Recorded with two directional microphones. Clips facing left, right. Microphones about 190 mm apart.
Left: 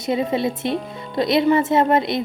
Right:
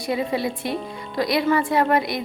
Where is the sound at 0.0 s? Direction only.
25° left (ahead or behind).